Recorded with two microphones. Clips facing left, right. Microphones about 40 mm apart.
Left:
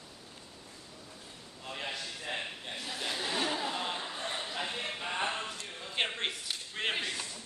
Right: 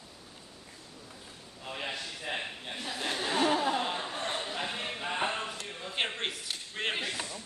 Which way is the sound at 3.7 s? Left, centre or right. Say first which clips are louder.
Right 4 dB; centre.